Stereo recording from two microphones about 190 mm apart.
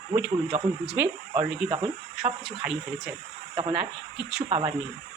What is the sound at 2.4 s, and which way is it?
Speech, 5° right (ahead or behind).